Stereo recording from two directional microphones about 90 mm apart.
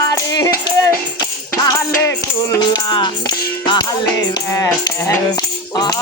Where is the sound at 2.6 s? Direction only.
55° left (ahead or behind).